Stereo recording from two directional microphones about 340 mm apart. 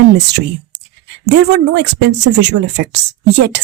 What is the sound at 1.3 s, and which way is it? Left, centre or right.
A woman's voice, right.